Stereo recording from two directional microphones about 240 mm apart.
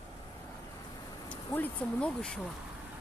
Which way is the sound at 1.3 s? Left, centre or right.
Centre.